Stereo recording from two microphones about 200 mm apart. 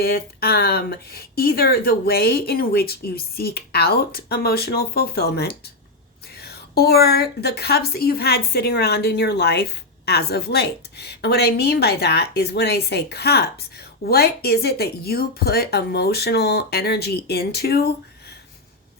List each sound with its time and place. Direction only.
0.0 s a woman's voice: 50° left (ahead or behind)